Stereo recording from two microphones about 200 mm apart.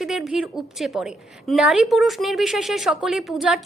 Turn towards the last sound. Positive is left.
turn(degrees=-5)  # may be behind; listen again after turning